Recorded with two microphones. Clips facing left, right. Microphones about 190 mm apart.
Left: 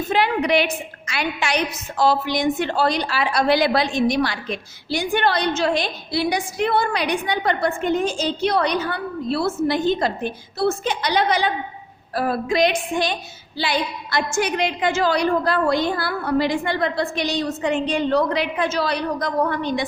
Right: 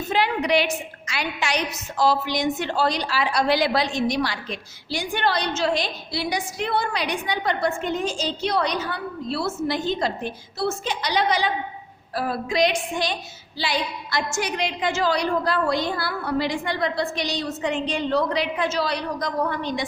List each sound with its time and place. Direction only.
0.1 s a woman's voice: 55° left (ahead or behind)